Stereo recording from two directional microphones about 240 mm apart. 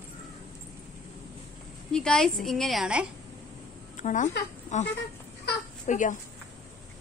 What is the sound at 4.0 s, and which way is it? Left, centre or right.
Speech, left.